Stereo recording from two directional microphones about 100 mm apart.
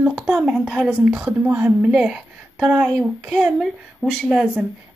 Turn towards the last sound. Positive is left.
turn(degrees=0)  # may be behind; listen again after turning